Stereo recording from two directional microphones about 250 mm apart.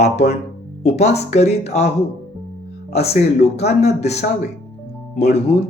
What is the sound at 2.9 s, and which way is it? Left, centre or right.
Speech, left.